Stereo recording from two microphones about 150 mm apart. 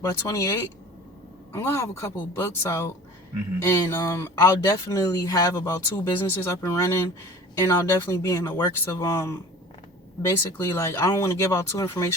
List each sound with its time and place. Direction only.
0.1 s speech: 20° left (ahead or behind)
1.5 s speech: 20° left (ahead or behind)